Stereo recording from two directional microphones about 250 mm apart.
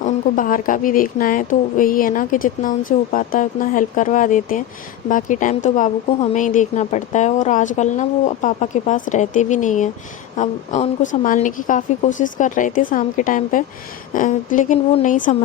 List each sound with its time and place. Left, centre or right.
0.0 s a woman's voice: left